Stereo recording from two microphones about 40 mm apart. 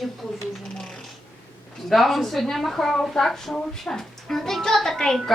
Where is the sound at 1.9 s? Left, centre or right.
Centre.